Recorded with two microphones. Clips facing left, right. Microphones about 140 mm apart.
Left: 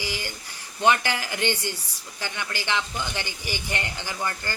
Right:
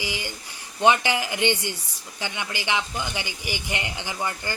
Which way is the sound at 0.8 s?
15° right (ahead or behind).